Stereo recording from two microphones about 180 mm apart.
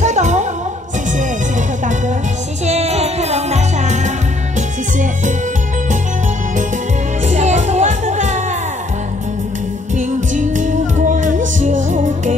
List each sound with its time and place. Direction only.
0.0 s music: 40° right (ahead or behind)
2.6 s music: 35° right (ahead or behind)
7.2 s music: 40° right (ahead or behind)
9.9 s music: 45° right (ahead or behind)